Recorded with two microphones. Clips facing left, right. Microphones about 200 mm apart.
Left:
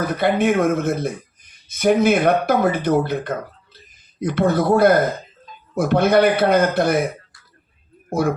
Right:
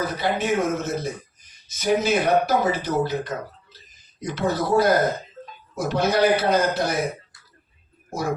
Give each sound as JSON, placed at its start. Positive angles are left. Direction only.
{"t": 0.2, "sound": "speech", "side_deg": 55}